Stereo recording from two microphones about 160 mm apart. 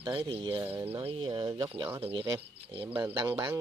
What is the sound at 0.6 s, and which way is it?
Speech, 15° right (ahead or behind).